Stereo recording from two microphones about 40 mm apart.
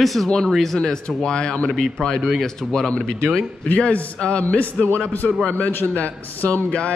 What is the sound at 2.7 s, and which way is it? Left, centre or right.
Speech, centre.